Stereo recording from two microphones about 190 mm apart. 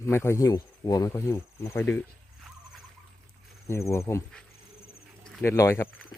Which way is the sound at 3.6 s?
15° left (ahead or behind).